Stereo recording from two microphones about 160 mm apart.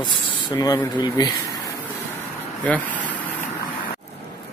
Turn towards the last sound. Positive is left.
turn(degrees=10)  # may be behind; listen again after turning